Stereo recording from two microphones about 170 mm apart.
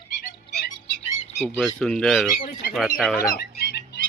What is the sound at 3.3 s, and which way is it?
Fowl, 65° left (ahead or behind).